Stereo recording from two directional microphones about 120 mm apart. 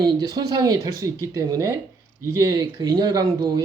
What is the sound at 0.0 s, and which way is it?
Speech, 35° right (ahead or behind).